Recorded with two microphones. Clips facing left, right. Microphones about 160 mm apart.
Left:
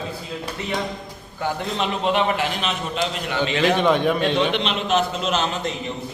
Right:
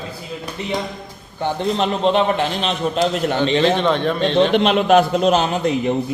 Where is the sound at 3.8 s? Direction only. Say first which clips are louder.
Right 1 dB; 10° left (ahead or behind).